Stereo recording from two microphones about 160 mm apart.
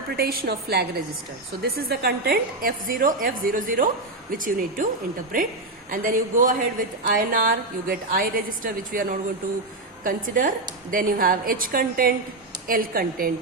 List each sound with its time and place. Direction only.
0.2 s a woman's voice: 80° right; by 4.9 s 55° right (ahead or behind)
5.9 s a woman's voice: 60° right (ahead or behind)